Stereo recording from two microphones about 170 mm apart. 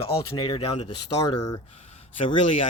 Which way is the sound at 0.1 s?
30° left (ahead or behind).